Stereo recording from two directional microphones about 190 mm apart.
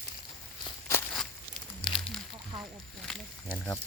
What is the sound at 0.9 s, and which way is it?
Walk, 10° left (ahead or behind).